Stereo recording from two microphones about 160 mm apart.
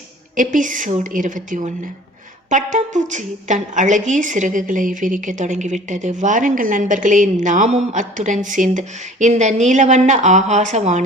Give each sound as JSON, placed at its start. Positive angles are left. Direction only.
{"t": 0.3, "sound": "a woman's voice", "side_deg": -55}